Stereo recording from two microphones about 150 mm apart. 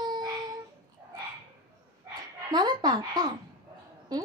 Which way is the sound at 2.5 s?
30° right (ahead or behind).